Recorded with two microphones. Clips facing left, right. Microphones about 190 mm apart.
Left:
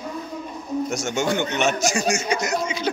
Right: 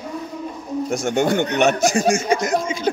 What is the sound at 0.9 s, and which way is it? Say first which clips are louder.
Speech: right 7 dB; 55° right (ahead or behind).